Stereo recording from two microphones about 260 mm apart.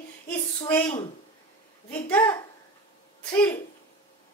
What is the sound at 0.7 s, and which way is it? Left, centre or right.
A woman's voice, centre.